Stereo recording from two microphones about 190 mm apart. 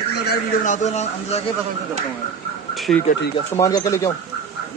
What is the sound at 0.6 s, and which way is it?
Speech, 40° left (ahead or behind).